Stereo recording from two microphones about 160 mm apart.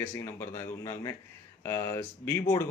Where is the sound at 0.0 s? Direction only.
10° left (ahead or behind).